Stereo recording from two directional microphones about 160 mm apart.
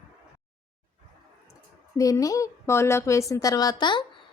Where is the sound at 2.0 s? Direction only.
20° left (ahead or behind).